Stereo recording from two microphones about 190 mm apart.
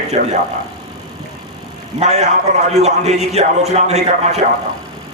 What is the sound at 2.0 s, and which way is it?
A man's voice, 35° right (ahead or behind).